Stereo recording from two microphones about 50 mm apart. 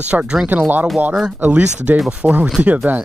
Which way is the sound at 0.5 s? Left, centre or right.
Right.